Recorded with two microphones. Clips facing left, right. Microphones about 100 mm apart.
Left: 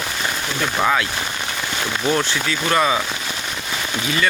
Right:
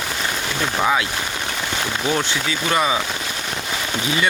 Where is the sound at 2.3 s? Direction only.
15° right (ahead or behind).